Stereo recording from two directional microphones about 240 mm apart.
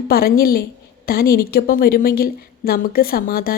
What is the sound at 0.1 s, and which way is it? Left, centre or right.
A woman's voice, left.